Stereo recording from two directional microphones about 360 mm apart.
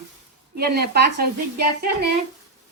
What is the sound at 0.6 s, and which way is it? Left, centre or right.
Speech, right.